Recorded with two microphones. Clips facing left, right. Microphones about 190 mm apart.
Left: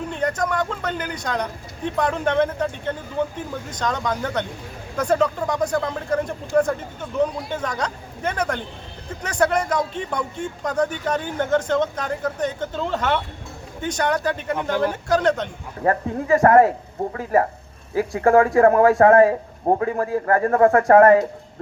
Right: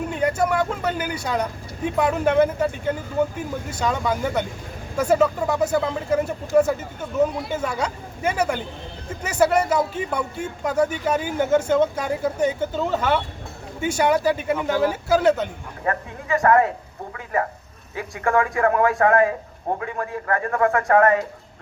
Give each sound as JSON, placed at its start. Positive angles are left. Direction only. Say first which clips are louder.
{"t": 0.1, "sound": "speech", "louder": "right 2 dB", "side_deg": -10}
{"t": 15.8, "sound": "speech", "louder": "left 6 dB", "side_deg": 35}
{"t": 17.9, "sound": "speech", "louder": "left 6 dB", "side_deg": 35}